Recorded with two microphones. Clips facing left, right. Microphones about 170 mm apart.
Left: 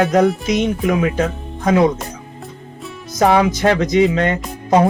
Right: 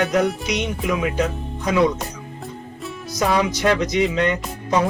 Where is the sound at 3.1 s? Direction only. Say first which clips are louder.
Left 6 dB; 55° left (ahead or behind).